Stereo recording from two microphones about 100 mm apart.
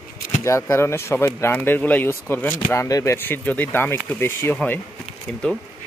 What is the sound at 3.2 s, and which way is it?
Speech, 20° left (ahead or behind).